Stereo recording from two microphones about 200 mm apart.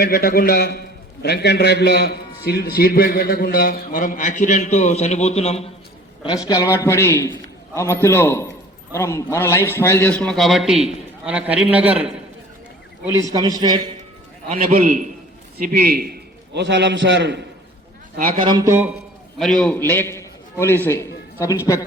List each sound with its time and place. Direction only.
0.0 s a man's voice: 50° left (ahead or behind); by 5.7 s 30° left (ahead or behind)
6.5 s a man's voice: 15° left (ahead or behind); by 12.2 s 5° right (ahead or behind)
13.1 s a man's voice: 15° right (ahead or behind)
14.5 s a man's voice: 45° right (ahead or behind); by 17.4 s 60° right (ahead or behind)
18.5 s a man's voice: 15° right (ahead or behind)
19.4 s a man's voice: 5° left (ahead or behind)